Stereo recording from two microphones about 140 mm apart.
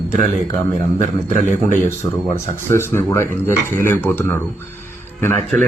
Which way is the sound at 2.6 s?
20° left (ahead or behind).